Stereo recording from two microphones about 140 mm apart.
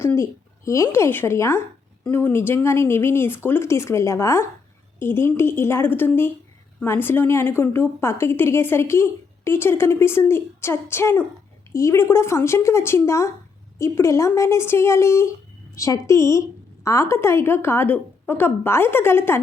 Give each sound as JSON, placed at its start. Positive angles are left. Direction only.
{"t": 0.0, "sound": "a woman's voice", "side_deg": 20}